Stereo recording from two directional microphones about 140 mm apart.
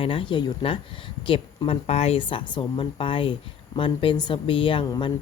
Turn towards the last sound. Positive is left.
turn(degrees=30)  # may be behind; listen again after turning